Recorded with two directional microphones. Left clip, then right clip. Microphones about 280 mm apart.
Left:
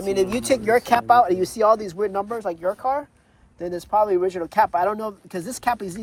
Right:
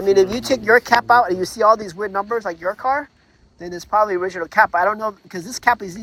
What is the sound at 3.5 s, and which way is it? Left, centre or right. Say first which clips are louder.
Speech: left 2 dB; centre.